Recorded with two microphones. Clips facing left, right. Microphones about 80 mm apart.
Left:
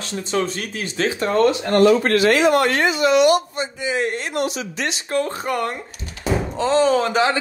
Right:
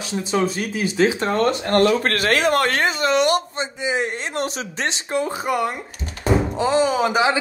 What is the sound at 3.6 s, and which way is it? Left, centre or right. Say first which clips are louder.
Speech: left 1 dB; right.